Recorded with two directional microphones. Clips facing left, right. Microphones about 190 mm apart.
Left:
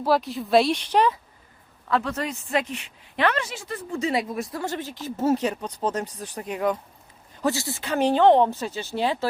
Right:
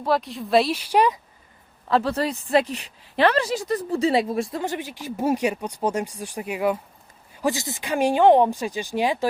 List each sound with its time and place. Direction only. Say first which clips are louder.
0.0 s speech: left 1 dB; centre (ahead or behind)
1.9 s a woman's voice: right 4 dB; 30° right (ahead or behind)
4.6 s speech: right 1 dB; 15° right (ahead or behind)